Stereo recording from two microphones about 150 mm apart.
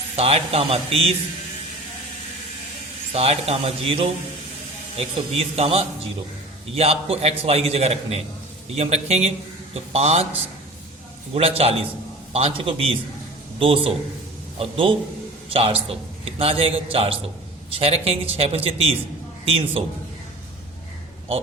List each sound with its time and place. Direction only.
0.2 s a man's voice: 40° right (ahead or behind)
3.1 s a man's voice: 45° right (ahead or behind)
11.3 s a man's voice: 40° right (ahead or behind)